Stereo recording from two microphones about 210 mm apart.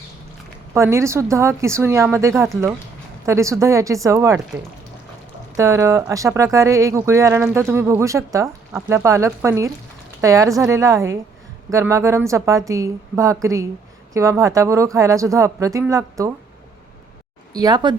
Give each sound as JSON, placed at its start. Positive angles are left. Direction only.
{"t": 0.7, "sound": "speech", "side_deg": -15}
{"t": 5.5, "sound": "speech", "side_deg": -15}
{"t": 17.5, "sound": "speech", "side_deg": -20}